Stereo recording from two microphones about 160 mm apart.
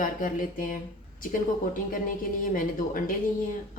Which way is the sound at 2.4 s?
60° left (ahead or behind).